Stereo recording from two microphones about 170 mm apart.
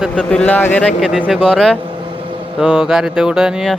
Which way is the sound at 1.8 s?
30° right (ahead or behind).